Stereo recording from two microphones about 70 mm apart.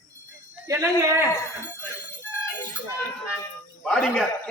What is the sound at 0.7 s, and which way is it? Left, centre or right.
Speech, right.